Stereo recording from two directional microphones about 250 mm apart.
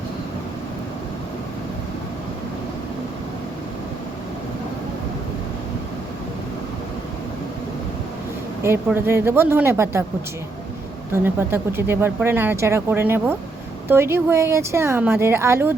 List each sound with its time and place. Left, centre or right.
8.6 s speech: centre
11.1 s speech: centre